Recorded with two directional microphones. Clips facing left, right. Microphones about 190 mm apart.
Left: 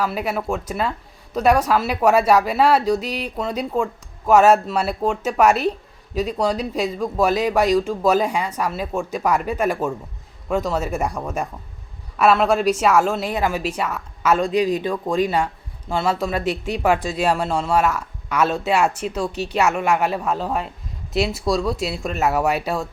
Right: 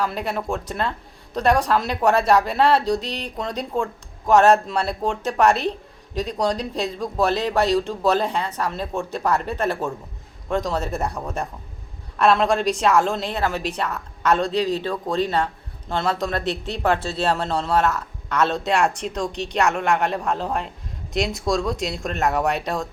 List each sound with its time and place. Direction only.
0.0 s speech: 5° left (ahead or behind)